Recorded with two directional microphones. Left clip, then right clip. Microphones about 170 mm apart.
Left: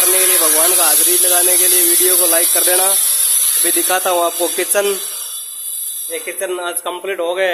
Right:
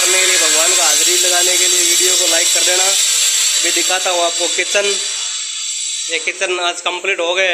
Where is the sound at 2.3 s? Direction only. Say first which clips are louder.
Right 3 dB; 30° left (ahead or behind).